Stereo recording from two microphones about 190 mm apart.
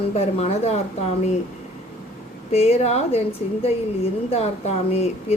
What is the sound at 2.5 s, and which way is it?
A woman's voice, 35° left (ahead or behind).